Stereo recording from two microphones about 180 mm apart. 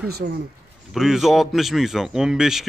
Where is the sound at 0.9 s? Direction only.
Centre (ahead or behind).